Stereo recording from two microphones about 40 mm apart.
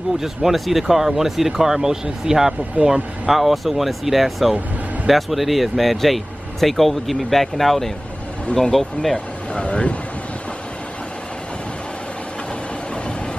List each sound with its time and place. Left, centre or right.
0.2 s speech: centre
9.1 s speech: left